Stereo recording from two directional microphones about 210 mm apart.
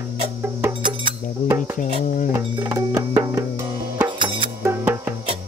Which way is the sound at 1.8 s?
40° left (ahead or behind).